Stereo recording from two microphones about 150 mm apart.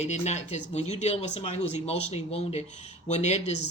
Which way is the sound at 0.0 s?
50° left (ahead or behind).